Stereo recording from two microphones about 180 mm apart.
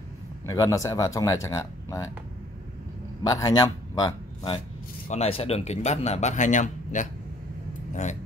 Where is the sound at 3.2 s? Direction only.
20° left (ahead or behind).